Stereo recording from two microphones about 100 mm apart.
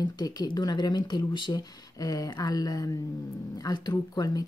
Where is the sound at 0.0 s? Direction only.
45° left (ahead or behind).